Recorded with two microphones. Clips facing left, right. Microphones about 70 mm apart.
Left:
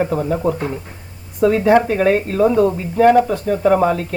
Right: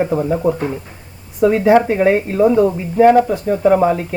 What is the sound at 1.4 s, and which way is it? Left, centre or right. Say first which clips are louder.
Speech: right 1 dB; centre.